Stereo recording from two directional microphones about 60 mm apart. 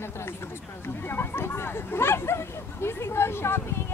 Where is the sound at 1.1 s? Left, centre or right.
Left.